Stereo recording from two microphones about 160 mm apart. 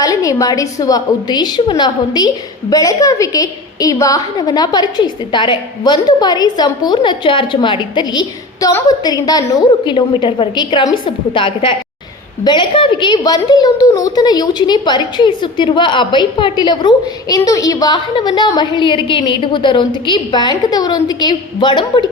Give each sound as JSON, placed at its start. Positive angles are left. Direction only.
{"t": 0.0, "sound": "a woman's voice", "side_deg": 20}